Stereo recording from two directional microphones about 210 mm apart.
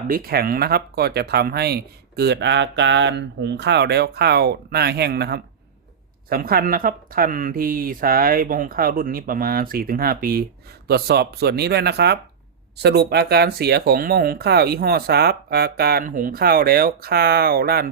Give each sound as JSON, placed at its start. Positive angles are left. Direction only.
{"t": 0.1, "sound": "speech", "side_deg": -45}